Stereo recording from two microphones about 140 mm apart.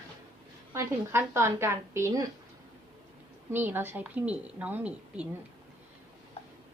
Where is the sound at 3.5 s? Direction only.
15° right (ahead or behind).